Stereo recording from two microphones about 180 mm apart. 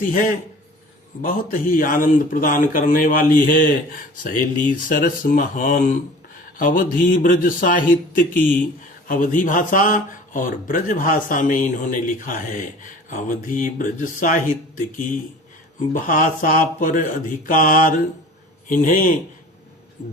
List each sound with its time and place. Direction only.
0.0 s speech: 50° left (ahead or behind)